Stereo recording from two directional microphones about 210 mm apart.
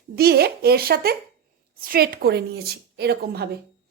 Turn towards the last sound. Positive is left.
turn(degrees=-50)  # may be behind; listen again after turning